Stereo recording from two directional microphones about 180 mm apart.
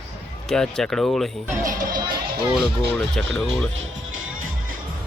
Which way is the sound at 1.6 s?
50° right (ahead or behind).